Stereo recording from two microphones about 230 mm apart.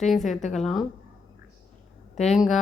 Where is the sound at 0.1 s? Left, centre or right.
Centre.